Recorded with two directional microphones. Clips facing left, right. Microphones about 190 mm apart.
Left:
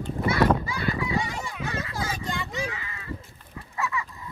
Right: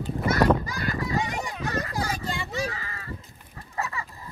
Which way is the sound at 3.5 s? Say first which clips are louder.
Left 2 dB; 35° right (ahead or behind).